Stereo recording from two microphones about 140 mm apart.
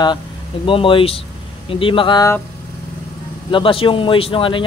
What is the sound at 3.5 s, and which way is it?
Speech, 40° left (ahead or behind).